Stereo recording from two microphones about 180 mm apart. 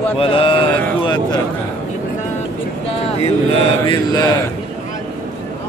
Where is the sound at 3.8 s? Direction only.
25° left (ahead or behind).